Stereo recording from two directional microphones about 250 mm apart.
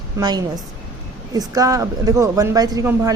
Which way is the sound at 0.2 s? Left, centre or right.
Centre.